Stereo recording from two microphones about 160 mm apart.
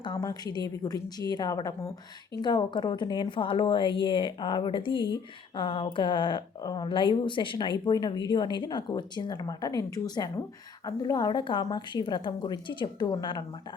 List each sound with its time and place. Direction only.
0.0 s speech: 25° left (ahead or behind)